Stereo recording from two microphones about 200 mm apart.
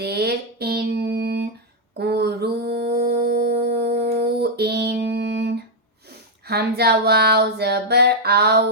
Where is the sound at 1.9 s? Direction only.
55° right (ahead or behind).